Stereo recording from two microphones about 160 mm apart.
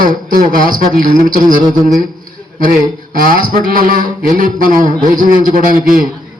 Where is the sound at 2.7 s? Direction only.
55° right (ahead or behind).